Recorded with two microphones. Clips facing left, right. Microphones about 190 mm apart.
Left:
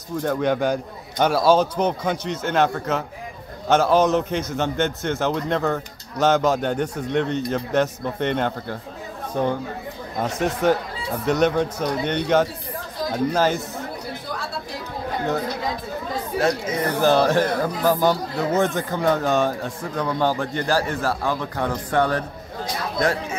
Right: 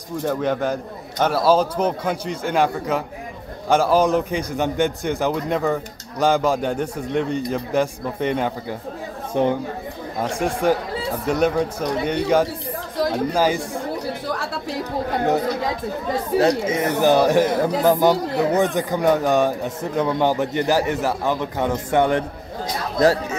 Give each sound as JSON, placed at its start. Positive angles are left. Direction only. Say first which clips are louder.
{"t": 0.2, "sound": "a man's voice", "louder": "even", "side_deg": 0}
{"t": 9.3, "sound": "speech", "louder": "right 3 dB", "side_deg": -20}
{"t": 10.1, "sound": "speech", "louder": "right 1 dB", "side_deg": -10}
{"t": 16.4, "sound": "speech", "louder": "right 3 dB", "side_deg": -25}